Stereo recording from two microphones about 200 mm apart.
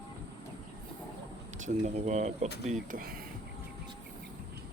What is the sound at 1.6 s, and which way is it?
Speech, 35° right (ahead or behind).